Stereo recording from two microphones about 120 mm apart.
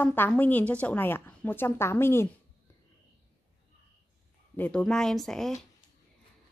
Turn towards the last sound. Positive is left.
turn(degrees=0)  # may be behind; listen again after turning